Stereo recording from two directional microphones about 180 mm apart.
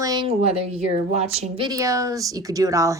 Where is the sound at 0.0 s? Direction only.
20° right (ahead or behind).